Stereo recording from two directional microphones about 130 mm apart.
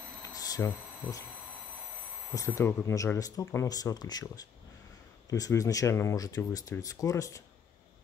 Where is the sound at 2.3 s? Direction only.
25° left (ahead or behind).